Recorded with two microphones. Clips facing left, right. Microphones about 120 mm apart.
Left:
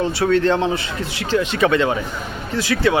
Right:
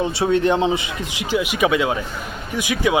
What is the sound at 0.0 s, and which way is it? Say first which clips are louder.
Speech: left 1 dB; 20° right (ahead or behind).